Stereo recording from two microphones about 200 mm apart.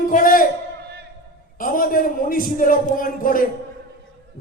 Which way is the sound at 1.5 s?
45° left (ahead or behind).